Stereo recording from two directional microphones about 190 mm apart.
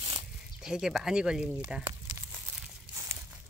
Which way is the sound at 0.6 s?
5° right (ahead or behind).